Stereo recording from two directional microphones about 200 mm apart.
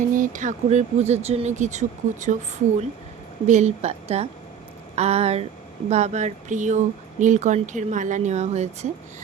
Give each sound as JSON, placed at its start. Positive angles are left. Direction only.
{"t": 0.1, "sound": "speech", "side_deg": -40}
{"t": 3.4, "sound": "speech", "side_deg": -35}